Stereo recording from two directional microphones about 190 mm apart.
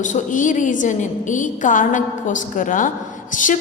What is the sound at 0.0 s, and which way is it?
A woman's voice, 40° left (ahead or behind).